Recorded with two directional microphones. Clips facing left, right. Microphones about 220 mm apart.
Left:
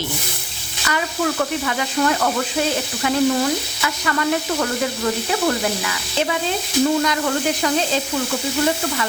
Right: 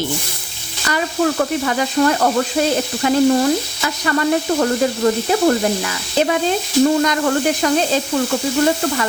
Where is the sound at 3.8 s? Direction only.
35° right (ahead or behind).